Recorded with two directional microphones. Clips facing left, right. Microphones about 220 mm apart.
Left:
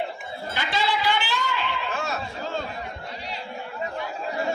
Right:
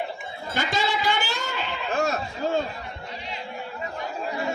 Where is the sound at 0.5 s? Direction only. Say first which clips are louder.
Right 1 dB; 45° right (ahead or behind).